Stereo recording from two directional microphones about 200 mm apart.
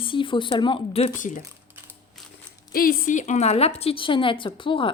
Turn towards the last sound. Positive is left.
turn(degrees=25)  # may be behind; listen again after turning